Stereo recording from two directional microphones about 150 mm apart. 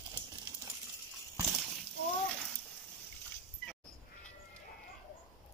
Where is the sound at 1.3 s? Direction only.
5° right (ahead or behind).